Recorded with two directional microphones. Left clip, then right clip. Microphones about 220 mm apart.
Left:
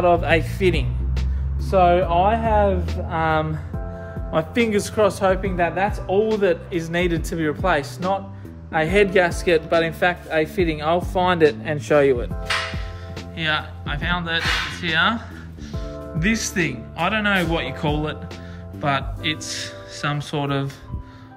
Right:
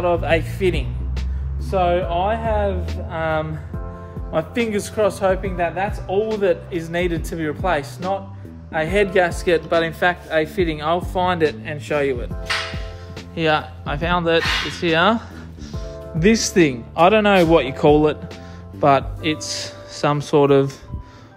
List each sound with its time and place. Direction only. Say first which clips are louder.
0.0 s a man's voice: left 1 dB; centre (ahead or behind)
13.3 s speech: right 4 dB; 20° right (ahead or behind)